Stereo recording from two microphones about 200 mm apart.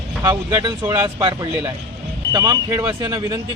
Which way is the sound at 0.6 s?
20° right (ahead or behind).